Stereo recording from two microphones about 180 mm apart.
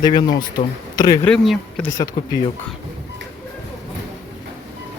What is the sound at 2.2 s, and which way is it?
Speech, 25° left (ahead or behind).